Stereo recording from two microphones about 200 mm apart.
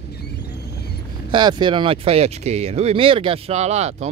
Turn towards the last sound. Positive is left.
turn(degrees=-35)  # may be behind; listen again after turning